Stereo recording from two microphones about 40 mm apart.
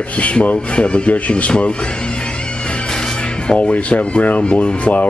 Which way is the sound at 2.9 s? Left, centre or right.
Left.